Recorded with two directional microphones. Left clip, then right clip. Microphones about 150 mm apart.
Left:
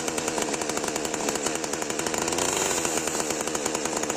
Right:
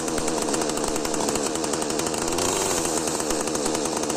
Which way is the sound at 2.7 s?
10° left (ahead or behind).